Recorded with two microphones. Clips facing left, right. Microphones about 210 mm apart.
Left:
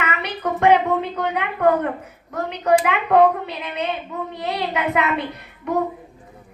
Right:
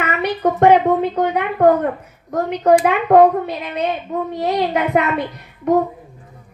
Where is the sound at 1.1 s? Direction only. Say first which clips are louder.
Right 6 dB; 35° right (ahead or behind).